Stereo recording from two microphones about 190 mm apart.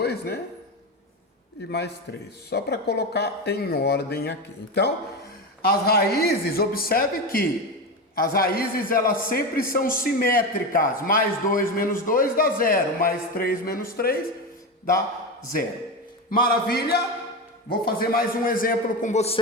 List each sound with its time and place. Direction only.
0.0 s a sound: 55° left (ahead or behind)
2.5 s a man's voice: 60° left (ahead or behind)
16.3 s a man's voice: 50° left (ahead or behind)
17.8 s a man's voice: 50° left (ahead or behind); by 19.4 s 35° left (ahead or behind)